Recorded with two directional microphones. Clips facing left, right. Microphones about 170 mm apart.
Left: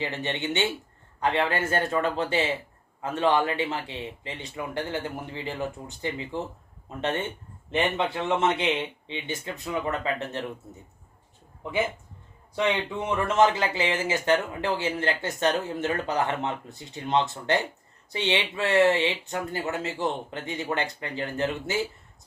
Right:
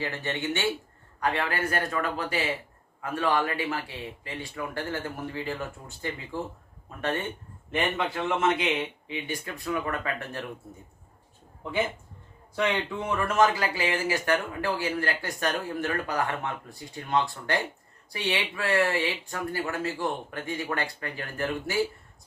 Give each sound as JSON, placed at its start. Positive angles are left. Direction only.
{"t": 0.0, "sound": "speech", "side_deg": 20}
{"t": 12.5, "sound": "speech", "side_deg": 20}